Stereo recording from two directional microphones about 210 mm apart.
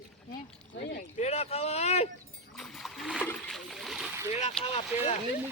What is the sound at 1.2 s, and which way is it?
Speech, 30° left (ahead or behind).